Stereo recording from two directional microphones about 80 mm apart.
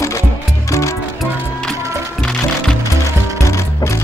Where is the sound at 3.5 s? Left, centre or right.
Left.